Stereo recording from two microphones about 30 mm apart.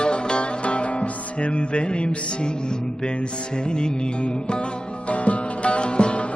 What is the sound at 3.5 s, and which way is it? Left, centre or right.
Music, left.